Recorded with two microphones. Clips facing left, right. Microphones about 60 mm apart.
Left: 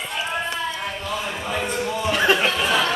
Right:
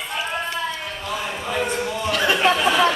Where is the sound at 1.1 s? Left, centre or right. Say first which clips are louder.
Right 2 dB; centre.